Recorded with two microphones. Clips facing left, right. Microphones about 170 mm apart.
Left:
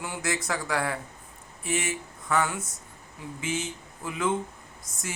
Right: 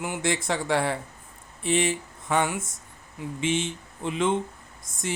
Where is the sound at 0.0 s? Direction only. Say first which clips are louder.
Right 4 dB; 25° right (ahead or behind).